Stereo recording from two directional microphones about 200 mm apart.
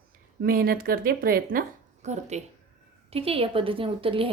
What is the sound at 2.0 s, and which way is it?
A woman's voice, 35° right (ahead or behind).